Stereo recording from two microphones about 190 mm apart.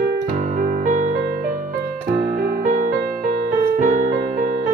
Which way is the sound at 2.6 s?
40° right (ahead or behind).